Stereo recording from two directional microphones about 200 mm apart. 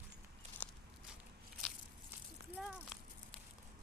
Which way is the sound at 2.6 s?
5° right (ahead or behind).